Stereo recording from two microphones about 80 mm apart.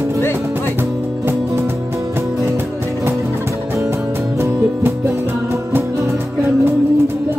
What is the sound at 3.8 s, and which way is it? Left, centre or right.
Music, right.